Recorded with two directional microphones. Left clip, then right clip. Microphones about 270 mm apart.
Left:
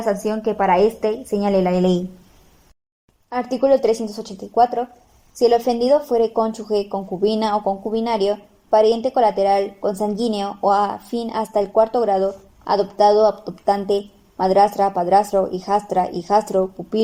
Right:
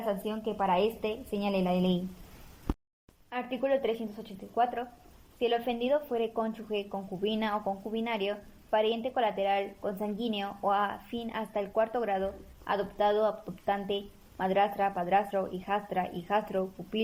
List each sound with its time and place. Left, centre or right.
0.0 s a woman's voice: left
3.2 s a woman's voice: left